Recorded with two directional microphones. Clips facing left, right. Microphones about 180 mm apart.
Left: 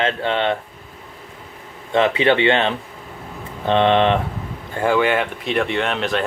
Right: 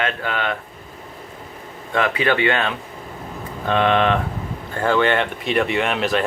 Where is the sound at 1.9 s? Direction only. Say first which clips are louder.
Left 4 dB; 25° left (ahead or behind).